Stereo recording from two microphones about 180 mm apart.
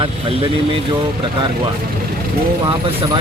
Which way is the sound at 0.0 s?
30° right (ahead or behind).